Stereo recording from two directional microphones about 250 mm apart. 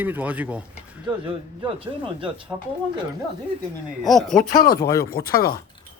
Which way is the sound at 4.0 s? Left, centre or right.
Centre.